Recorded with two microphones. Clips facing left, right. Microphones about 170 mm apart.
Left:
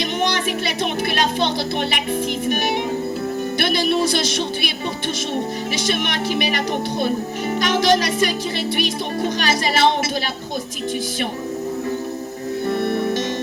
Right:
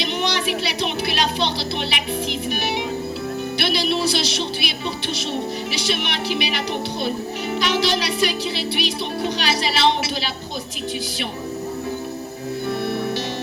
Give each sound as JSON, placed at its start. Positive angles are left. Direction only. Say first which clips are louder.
{"t": 0.0, "sound": "speech", "louder": "left 2 dB", "side_deg": 50}
{"t": 3.6, "sound": "speech", "louder": "left 3 dB", "side_deg": 50}
{"t": 5.7, "sound": "speech", "louder": "left 5 dB", "side_deg": 50}
{"t": 7.6, "sound": "speech", "louder": "left 4 dB", "side_deg": 50}
{"t": 12.8, "sound": "music", "louder": "left 3 dB", "side_deg": 50}